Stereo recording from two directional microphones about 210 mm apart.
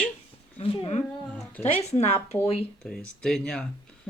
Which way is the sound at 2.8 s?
Centre (ahead or behind).